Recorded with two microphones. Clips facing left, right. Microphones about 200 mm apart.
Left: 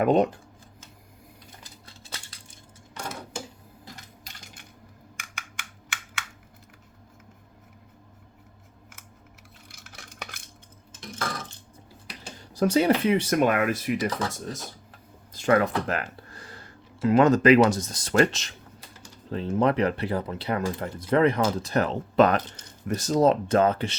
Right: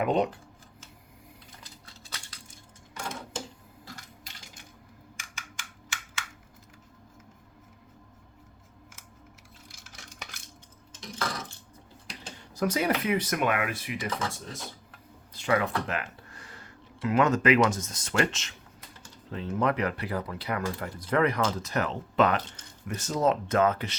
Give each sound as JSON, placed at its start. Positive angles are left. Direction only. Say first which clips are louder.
{"t": 0.0, "sound": "speech", "louder": "left 5 dB", "side_deg": 45}
{"t": 5.1, "sound": "a sound", "louder": "left 3 dB", "side_deg": 60}
{"t": 9.6, "sound": "dishes", "louder": "left 3 dB", "side_deg": 60}
{"t": 12.4, "sound": "speech", "louder": "left 6 dB", "side_deg": 30}